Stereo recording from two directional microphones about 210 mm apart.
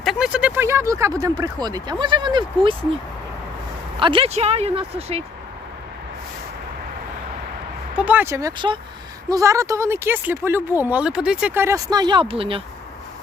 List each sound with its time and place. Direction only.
0.0 s speech: centre (ahead or behind); by 2.7 s 20° right (ahead or behind)
4.0 s speech: 25° right (ahead or behind)
7.9 s speech: 5° right (ahead or behind); by 12.6 s 25° right (ahead or behind)